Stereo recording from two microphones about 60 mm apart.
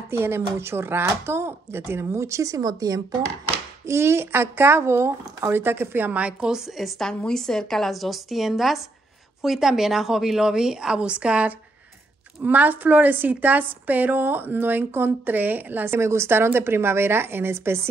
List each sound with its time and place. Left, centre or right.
0.1 s a woman's voice: right
3.8 s speech: right
6.2 s a woman's voice: centre
6.8 s a woman's voice: centre
12.4 s a woman's voice: right